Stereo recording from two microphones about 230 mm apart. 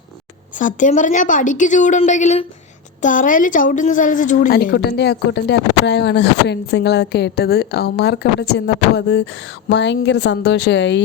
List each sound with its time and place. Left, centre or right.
0.6 s a woman's voice: left